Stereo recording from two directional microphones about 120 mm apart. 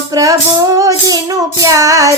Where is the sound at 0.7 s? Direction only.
30° right (ahead or behind).